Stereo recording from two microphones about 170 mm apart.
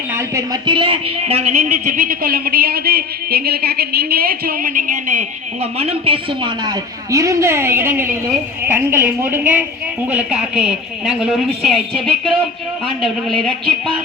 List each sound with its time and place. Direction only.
0.1 s a woman's voice: 20° right (ahead or behind); by 5.2 s 50° right (ahead or behind)
5.7 s a woman's voice: 35° right (ahead or behind); by 13.9 s 5° left (ahead or behind)